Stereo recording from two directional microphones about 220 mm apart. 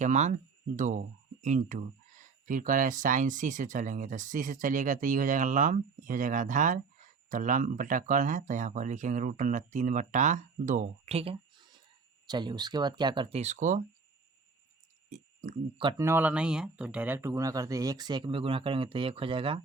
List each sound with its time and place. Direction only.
0.0 s speech: 35° right (ahead or behind)
15.1 s speech: 30° right (ahead or behind)
15.9 s speech: 10° right (ahead or behind)